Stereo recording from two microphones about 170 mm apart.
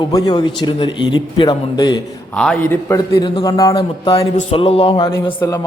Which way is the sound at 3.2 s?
25° left (ahead or behind).